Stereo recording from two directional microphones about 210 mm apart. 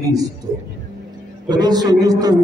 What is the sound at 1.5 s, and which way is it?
Speech, 20° right (ahead or behind).